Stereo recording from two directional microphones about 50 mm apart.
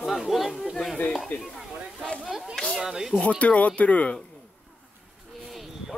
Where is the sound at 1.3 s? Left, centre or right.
Left.